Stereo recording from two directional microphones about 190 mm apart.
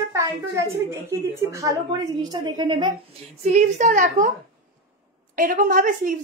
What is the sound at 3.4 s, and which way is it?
Speech, 40° right (ahead or behind).